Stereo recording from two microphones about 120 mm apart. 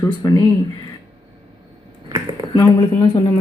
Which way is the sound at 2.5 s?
40° left (ahead or behind).